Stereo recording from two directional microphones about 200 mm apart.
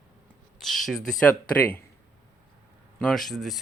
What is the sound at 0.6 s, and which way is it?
Speech, centre (ahead or behind).